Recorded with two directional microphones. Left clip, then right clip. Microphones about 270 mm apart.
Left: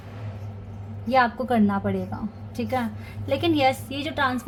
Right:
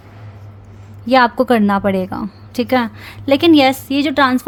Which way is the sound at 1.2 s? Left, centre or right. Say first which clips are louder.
Right 9 dB; right.